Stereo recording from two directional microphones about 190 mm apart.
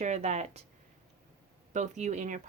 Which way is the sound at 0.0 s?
35° right (ahead or behind).